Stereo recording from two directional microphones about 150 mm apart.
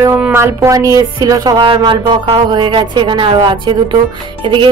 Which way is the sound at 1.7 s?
35° right (ahead or behind).